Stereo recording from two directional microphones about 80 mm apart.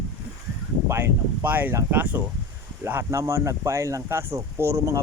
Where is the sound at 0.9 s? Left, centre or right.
Right.